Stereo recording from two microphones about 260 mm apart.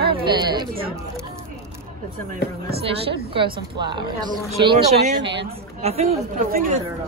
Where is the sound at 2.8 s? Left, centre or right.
Centre.